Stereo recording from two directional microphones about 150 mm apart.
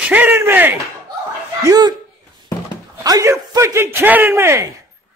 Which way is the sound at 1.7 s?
25° right (ahead or behind).